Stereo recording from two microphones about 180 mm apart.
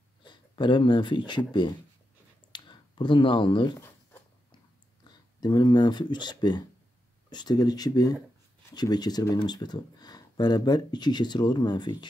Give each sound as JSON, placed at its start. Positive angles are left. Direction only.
{"t": 0.2, "sound": "speech", "side_deg": 25}
{"t": 5.4, "sound": "speech", "side_deg": 25}